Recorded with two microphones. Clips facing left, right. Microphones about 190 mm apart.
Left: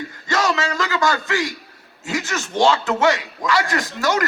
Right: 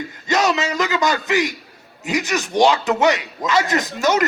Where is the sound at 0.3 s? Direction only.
20° right (ahead or behind).